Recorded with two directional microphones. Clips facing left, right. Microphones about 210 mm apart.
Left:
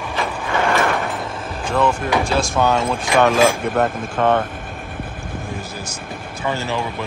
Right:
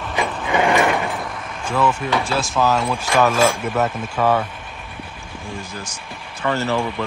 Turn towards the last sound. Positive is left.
turn(degrees=15)  # may be behind; listen again after turning